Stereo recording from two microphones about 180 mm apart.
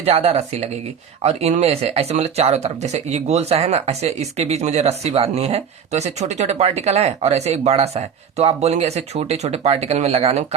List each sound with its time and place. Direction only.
0.0 s speech: 35° right (ahead or behind)